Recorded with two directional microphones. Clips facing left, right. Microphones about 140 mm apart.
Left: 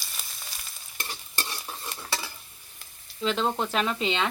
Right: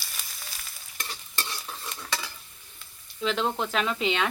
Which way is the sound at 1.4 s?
30° left (ahead or behind).